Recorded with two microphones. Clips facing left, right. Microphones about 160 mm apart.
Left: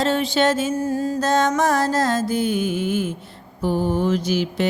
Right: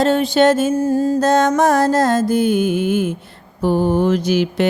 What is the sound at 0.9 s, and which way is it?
Music, 45° right (ahead or behind).